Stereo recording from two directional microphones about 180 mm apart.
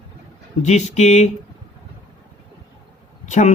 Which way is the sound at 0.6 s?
40° left (ahead or behind).